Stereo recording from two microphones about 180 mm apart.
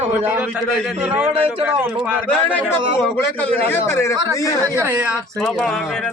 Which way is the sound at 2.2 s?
10° left (ahead or behind).